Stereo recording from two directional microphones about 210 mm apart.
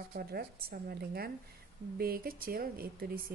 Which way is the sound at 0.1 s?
50° right (ahead or behind).